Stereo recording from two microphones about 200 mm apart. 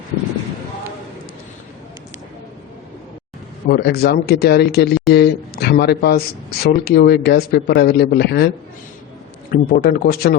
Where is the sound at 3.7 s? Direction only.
50° left (ahead or behind).